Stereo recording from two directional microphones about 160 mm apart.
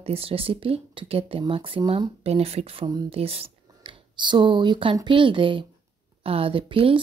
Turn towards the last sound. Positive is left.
turn(degrees=-35)  # may be behind; listen again after turning